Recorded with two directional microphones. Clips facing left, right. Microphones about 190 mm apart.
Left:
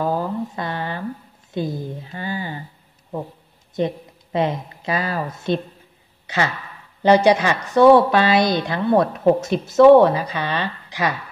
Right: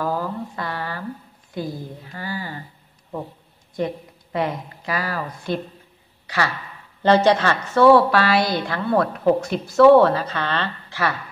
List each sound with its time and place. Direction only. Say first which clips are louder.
0.0 s a sound: left 3 dB; 20° left (ahead or behind)
1.5 s speech: left 4 dB; 20° left (ahead or behind)
3.7 s a woman's voice: left 3 dB; 20° left (ahead or behind)